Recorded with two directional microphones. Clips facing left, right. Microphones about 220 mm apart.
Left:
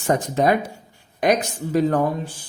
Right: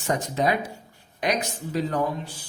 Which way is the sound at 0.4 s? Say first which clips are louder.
Left 5 dB; 55° left (ahead or behind).